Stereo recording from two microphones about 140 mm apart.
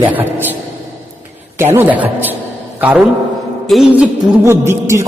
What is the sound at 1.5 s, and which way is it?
Speech, 15° right (ahead or behind).